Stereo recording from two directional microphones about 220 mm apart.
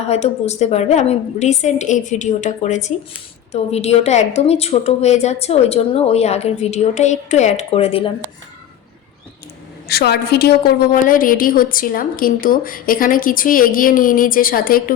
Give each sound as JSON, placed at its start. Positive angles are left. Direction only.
{"t": 0.1, "sound": "a woman's voice", "side_deg": 30}
{"t": 9.9, "sound": "a woman's voice", "side_deg": 45}